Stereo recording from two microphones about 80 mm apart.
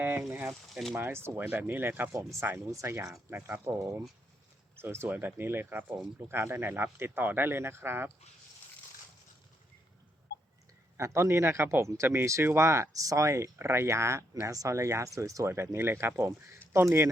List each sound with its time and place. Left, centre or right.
0.0 s speech: right
0.4 s speech: centre
0.9 s speech: right
3.8 s speech: right
10.9 s speech: right